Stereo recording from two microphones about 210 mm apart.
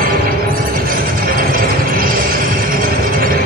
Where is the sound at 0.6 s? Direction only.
40° right (ahead or behind).